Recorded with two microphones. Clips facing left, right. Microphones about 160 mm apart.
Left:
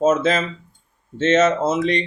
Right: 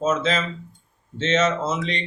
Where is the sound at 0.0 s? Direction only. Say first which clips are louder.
Left 5 dB; 50° left (ahead or behind).